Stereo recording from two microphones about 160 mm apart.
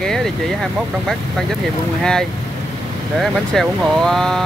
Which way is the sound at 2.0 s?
5° left (ahead or behind).